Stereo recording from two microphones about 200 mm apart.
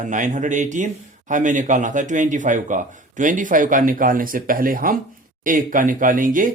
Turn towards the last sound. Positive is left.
turn(degrees=-40)  # may be behind; listen again after turning